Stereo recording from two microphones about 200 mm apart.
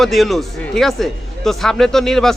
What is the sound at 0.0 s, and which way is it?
A man's voice, centre (ahead or behind).